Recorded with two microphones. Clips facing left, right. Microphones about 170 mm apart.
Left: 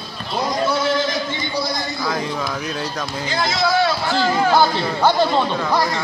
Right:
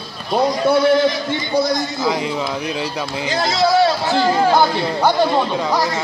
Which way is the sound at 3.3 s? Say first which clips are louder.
Right 3 dB; 35° right (ahead or behind).